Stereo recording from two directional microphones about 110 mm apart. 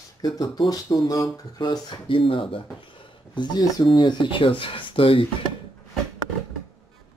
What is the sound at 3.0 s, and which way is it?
Speech, 45° left (ahead or behind).